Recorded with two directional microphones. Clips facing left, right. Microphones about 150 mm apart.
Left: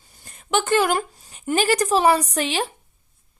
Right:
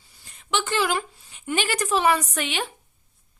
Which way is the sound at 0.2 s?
45° left (ahead or behind).